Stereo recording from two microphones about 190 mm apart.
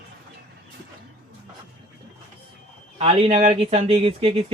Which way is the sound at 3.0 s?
30° right (ahead or behind).